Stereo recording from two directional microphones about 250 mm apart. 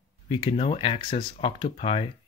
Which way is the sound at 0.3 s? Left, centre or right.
Centre.